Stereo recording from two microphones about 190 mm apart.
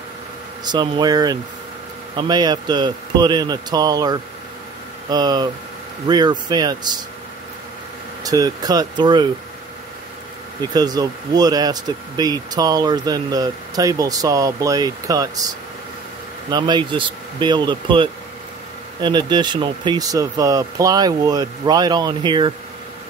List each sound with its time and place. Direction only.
0.7 s speech: 20° right (ahead or behind)
8.2 s speech: 20° right (ahead or behind)
10.6 s speech: 20° right (ahead or behind)
16.4 s speech: 20° right (ahead or behind)